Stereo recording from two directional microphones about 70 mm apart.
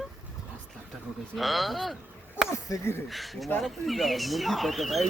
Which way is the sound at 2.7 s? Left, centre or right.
Left.